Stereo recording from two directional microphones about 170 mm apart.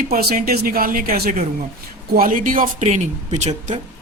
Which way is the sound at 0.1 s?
60° right (ahead or behind).